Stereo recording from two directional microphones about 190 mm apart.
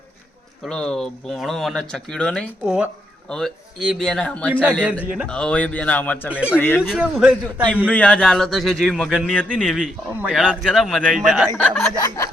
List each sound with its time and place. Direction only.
0.6 s a man's voice: 5° left (ahead or behind)
6.3 s speech: 5° right (ahead or behind)
6.6 s a man's voice: 10° left (ahead or behind)
6.8 s speech: centre (ahead or behind)
9.6 s speech: 5° right (ahead or behind)
11.9 s a man's voice: 15° left (ahead or behind)